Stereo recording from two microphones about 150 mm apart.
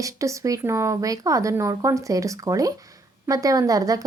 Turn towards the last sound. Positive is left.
turn(degrees=-25)  # may be behind; listen again after turning